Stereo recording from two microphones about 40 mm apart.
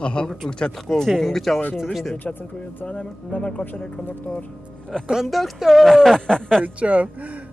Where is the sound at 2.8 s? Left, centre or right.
Left.